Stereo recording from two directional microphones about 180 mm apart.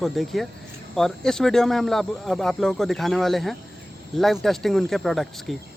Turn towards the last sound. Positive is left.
turn(degrees=0)  # may be behind; listen again after turning